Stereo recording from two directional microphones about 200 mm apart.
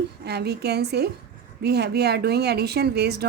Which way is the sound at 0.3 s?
55° right (ahead or behind).